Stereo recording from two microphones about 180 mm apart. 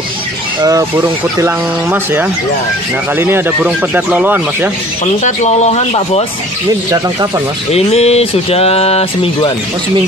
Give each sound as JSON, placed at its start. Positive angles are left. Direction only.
{"t": 0.6, "sound": "speech", "side_deg": -20}
{"t": 5.0, "sound": "speech", "side_deg": 40}
{"t": 6.9, "sound": "speech", "side_deg": -20}
{"t": 7.7, "sound": "speech", "side_deg": 35}